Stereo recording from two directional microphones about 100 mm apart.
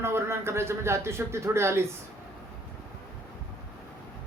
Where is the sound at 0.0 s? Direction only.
25° right (ahead or behind).